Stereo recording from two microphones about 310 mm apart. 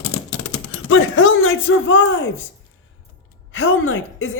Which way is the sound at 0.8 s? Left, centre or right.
Left.